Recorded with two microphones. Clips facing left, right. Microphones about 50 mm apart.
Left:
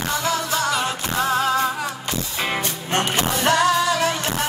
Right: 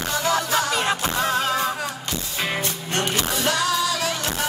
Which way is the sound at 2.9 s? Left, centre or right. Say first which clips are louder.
Left 4 dB; left.